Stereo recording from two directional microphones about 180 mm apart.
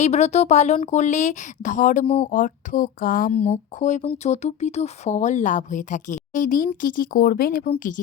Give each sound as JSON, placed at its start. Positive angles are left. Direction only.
{"t": 0.0, "sound": "speech", "side_deg": 40}
{"t": 2.0, "sound": "speech", "side_deg": 30}
{"t": 2.3, "sound": "speech", "side_deg": 45}
{"t": 3.4, "sound": "speech", "side_deg": 40}